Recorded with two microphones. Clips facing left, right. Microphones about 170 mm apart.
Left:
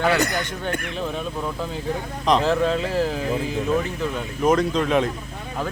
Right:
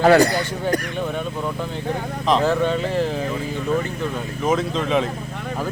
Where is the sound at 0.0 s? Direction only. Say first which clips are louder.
Right 7 dB; 35° right (ahead or behind).